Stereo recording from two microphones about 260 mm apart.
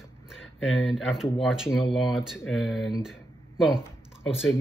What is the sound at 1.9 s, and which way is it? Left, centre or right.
Speech, centre.